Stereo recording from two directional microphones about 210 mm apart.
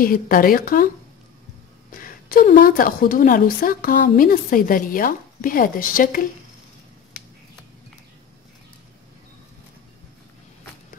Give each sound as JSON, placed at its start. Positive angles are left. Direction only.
{"t": 0.0, "sound": "speech", "side_deg": 45}
{"t": 1.9, "sound": "a woman's voice", "side_deg": 40}